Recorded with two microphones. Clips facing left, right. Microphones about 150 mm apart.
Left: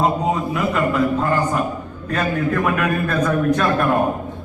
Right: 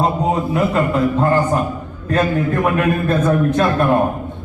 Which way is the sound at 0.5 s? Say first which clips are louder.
Right 3 dB; 30° right (ahead or behind).